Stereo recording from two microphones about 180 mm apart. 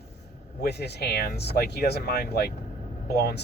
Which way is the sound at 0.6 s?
65° left (ahead or behind).